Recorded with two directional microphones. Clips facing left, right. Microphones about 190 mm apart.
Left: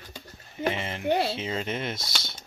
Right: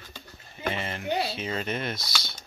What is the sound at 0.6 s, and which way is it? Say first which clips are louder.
Speech: left 3 dB; 20° left (ahead or behind).